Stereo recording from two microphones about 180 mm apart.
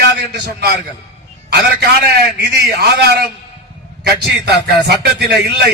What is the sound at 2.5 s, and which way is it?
Speech, 65° right (ahead or behind).